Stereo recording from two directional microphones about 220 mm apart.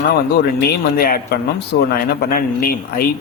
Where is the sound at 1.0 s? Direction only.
45° left (ahead or behind).